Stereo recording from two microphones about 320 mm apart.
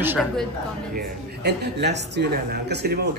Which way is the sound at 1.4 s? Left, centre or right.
Right.